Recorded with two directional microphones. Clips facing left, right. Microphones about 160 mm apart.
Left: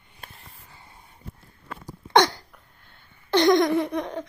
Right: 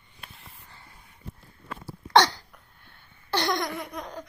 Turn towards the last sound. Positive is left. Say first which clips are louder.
# left 11 dB
turn(degrees=25)  # may be behind; listen again after turning